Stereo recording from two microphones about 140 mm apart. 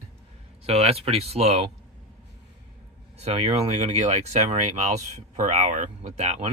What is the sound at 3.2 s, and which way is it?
Speech, 45° right (ahead or behind).